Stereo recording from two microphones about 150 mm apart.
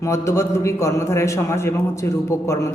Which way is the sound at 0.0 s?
20° left (ahead or behind).